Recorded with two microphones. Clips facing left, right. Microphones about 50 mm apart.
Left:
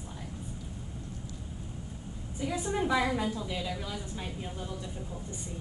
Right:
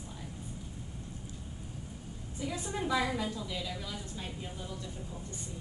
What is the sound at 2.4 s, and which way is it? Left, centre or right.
A woman's voice, left.